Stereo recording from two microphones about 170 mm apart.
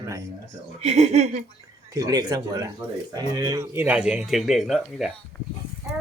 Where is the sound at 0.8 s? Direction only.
40° right (ahead or behind).